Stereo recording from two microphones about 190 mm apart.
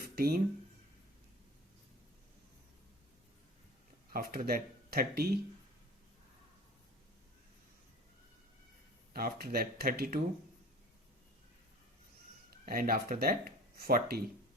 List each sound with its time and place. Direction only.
0.0 s a sound: 50° right (ahead or behind)
4.1 s speech: 50° right (ahead or behind)
9.1 s speech: 50° right (ahead or behind)
12.6 s speech: 50° right (ahead or behind)